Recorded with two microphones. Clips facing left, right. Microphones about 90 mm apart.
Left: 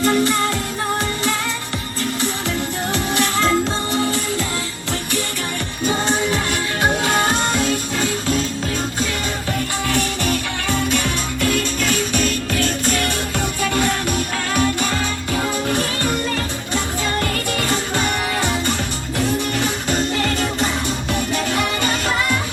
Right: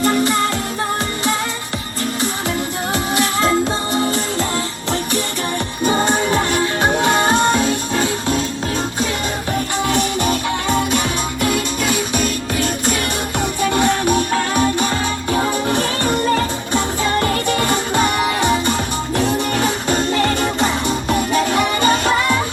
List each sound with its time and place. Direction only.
0.0 s music: 20° right (ahead or behind)
3.4 s music: 15° right (ahead or behind)
5.8 s music: 15° right (ahead or behind)
6.1 s music: 40° right (ahead or behind); by 8.4 s 20° right (ahead or behind)
9.8 s music: 20° right (ahead or behind)
17.7 s music: 20° right (ahead or behind)
19.5 s music: 35° right (ahead or behind)